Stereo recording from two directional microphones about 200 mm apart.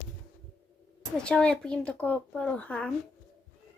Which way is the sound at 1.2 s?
5° left (ahead or behind).